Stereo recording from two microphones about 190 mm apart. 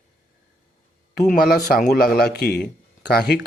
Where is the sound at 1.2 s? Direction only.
50° left (ahead or behind).